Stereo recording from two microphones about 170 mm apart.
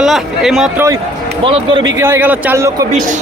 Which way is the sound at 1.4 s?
30° right (ahead or behind).